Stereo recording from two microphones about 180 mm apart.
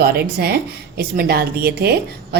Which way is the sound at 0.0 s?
60° right (ahead or behind).